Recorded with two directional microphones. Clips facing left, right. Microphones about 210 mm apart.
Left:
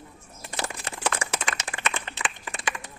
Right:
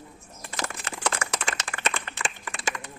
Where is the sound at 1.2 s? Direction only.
10° left (ahead or behind).